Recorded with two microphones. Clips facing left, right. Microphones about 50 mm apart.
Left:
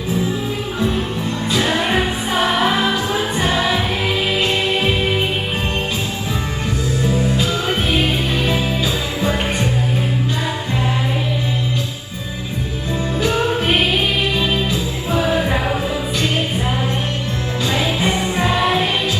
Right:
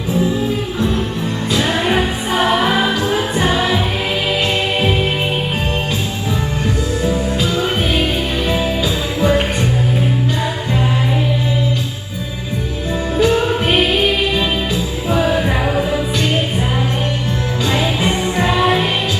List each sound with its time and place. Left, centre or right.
1.7 s music: centre
17.7 s music: right
18.5 s music: centre